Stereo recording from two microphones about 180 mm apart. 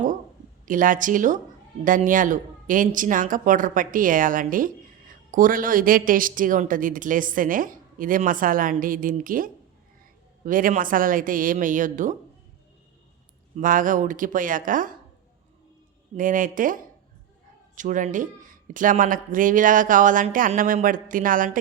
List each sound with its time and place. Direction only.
0.6 s a woman's voice: 50° right (ahead or behind)
13.6 s a woman's voice: 50° right (ahead or behind)
16.1 s a woman's voice: 50° right (ahead or behind)